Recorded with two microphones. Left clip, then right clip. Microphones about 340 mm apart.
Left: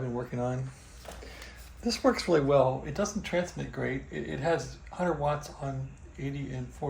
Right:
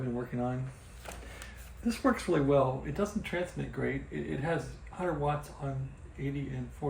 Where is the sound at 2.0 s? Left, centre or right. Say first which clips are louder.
Left 3 dB; centre.